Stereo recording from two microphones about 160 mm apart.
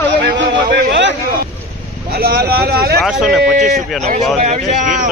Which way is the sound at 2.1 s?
75° right (ahead or behind).